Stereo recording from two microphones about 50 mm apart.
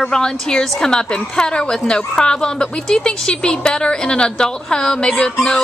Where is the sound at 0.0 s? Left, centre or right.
Centre.